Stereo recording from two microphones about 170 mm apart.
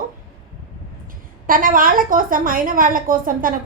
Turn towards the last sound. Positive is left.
turn(degrees=-55)  # may be behind; listen again after turning